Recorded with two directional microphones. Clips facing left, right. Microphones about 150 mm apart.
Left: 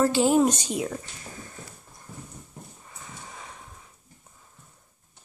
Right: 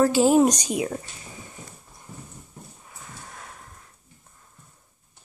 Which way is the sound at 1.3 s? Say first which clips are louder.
Even; 15° right (ahead or behind).